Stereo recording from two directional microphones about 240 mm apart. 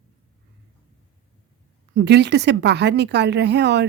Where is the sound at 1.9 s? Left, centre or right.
Right.